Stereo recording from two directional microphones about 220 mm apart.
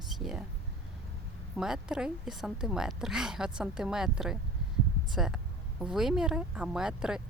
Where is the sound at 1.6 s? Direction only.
5° right (ahead or behind).